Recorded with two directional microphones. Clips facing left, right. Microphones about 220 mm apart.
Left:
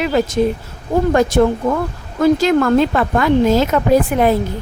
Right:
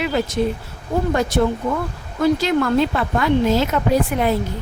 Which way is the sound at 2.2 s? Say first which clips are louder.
Left 4 dB; 45° left (ahead or behind).